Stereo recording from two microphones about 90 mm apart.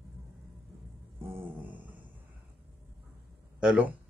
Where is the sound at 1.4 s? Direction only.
20° right (ahead or behind).